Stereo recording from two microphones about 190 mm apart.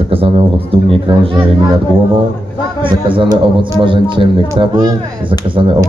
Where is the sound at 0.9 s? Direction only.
25° right (ahead or behind).